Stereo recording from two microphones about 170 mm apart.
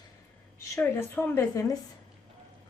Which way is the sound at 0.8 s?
10° left (ahead or behind).